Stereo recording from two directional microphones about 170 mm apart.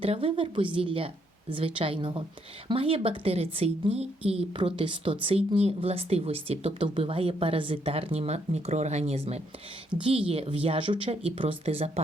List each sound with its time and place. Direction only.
0.0 s speech: 35° right (ahead or behind)